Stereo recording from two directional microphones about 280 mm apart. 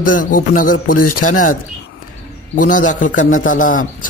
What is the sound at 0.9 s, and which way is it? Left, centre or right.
Speech, left.